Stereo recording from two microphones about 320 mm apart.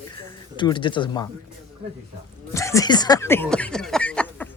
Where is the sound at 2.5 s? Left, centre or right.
Centre.